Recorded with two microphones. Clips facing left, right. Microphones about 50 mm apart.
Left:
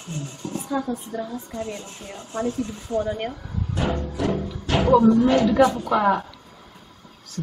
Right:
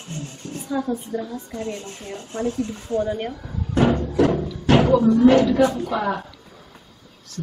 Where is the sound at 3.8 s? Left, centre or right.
Right.